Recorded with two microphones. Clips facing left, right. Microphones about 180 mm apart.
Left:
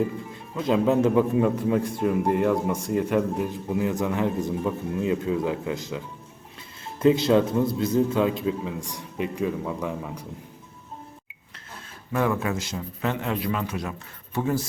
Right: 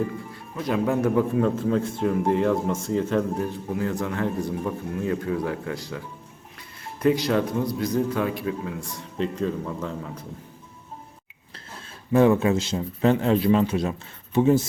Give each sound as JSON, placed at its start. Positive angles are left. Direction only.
{"t": 0.6, "sound": "a man's voice", "side_deg": 20}
{"t": 7.0, "sound": "a man's voice", "side_deg": 25}
{"t": 12.1, "sound": "a man's voice", "side_deg": -25}